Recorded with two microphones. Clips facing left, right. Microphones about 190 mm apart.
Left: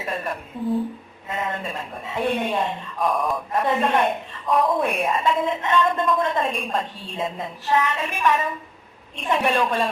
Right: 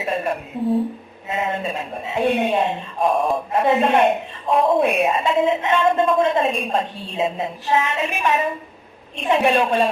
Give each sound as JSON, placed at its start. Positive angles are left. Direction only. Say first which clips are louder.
{"t": 0.0, "sound": "a woman's voice", "louder": "right 5 dB", "side_deg": -25}